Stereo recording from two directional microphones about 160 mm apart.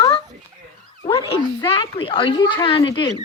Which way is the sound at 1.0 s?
35° left (ahead or behind).